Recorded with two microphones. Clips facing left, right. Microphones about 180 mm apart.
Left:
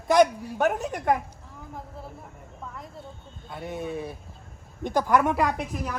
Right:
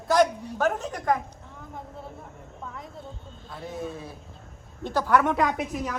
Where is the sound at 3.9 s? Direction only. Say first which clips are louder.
Left 5 dB; 60° left (ahead or behind).